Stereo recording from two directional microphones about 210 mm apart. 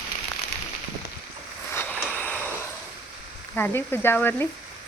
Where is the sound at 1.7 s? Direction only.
10° left (ahead or behind).